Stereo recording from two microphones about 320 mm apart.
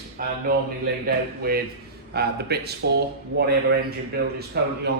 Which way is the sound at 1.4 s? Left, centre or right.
Right.